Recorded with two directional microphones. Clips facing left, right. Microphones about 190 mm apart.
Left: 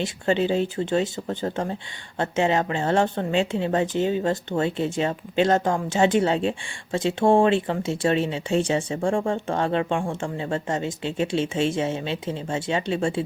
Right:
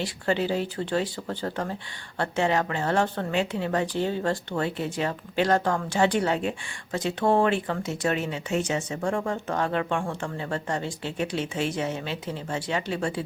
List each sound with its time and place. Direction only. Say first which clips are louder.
0.0 s a woman's voice: left 3 dB; 20° left (ahead or behind)